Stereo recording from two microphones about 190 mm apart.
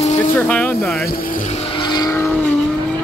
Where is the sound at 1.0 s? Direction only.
50° left (ahead or behind).